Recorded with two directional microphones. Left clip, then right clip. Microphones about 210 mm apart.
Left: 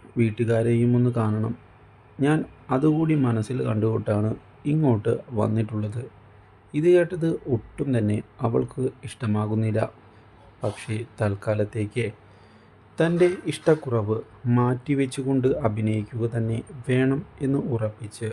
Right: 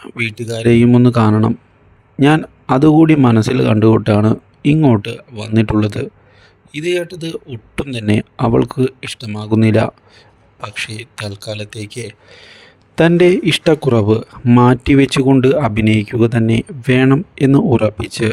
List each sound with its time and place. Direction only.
0.2 s speech: 45° right (ahead or behind)
11.3 s speech: 5° left (ahead or behind)
11.6 s speech: 45° right (ahead or behind)